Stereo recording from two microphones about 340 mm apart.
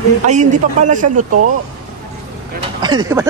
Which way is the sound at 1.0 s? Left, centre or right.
Right.